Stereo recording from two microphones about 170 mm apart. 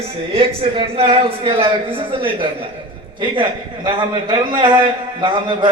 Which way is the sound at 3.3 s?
25° right (ahead or behind).